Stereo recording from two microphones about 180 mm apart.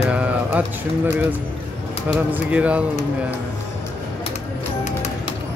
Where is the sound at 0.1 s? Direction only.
5° right (ahead or behind).